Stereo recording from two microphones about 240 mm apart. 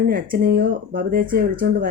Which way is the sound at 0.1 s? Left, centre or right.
Right.